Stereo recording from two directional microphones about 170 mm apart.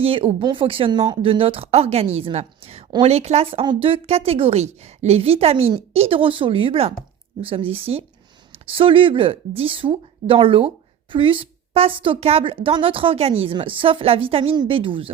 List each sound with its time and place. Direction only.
0.0 s a woman's voice: 35° right (ahead or behind)